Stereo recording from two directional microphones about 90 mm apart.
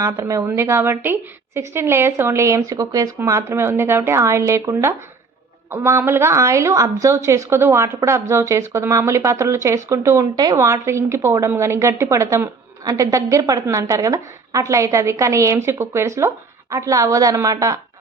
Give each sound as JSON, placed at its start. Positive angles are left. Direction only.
{"t": 0.1, "sound": "a woman's voice", "side_deg": -35}
{"t": 10.3, "sound": "a woman's voice", "side_deg": -45}
{"t": 10.6, "sound": "a woman's voice", "side_deg": -30}